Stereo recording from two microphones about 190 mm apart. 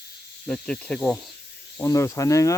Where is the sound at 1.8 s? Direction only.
15° left (ahead or behind).